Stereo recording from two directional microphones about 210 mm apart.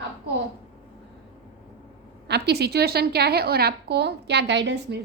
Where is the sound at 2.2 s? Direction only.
50° right (ahead or behind).